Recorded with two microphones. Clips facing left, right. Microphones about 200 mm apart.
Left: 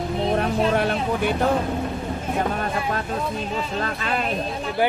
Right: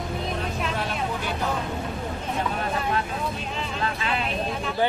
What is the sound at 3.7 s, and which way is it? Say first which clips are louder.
Speech: even; 45° left (ahead or behind).